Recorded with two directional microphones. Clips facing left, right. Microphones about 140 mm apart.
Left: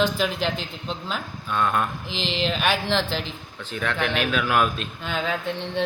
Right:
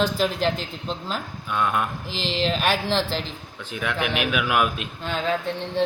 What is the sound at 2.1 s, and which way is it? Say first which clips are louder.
Speech: even; 40° right (ahead or behind).